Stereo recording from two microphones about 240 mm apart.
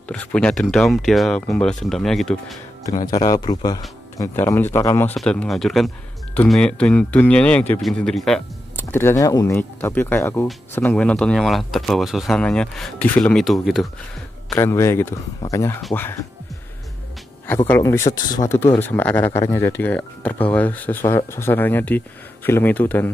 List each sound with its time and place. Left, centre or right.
0.1 s speech: centre
3.3 s speech: centre
14.5 s speech: centre
17.6 s speech: centre